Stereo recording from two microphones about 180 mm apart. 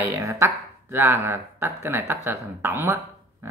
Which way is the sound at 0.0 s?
15° right (ahead or behind).